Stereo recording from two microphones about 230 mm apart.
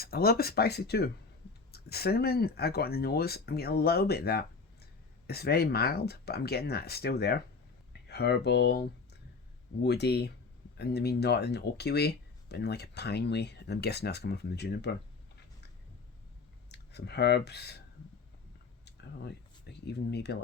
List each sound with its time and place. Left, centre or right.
0.0 s speech: left
16.6 s speech: left
18.9 s speech: left